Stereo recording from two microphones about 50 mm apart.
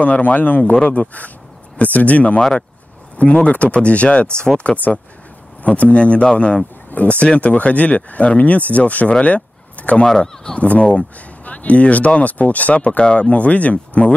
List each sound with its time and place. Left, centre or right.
0.0 s a man's voice: left
3.4 s speech: left
5.6 s speech: left
9.2 s a sound: left
10.0 s speech: centre
10.6 s speech: left